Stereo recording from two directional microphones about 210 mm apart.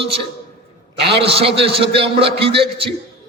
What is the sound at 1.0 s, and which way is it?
Speech, 25° right (ahead or behind).